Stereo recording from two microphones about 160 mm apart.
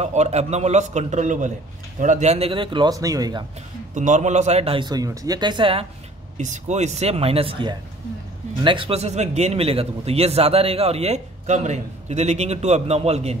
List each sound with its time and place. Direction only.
0.0 s a man's voice: 45° right (ahead or behind); by 3.4 s 25° right (ahead or behind)
3.9 s speech: 50° right (ahead or behind); by 5.9 s 35° right (ahead or behind)
6.3 s speech: 45° right (ahead or behind)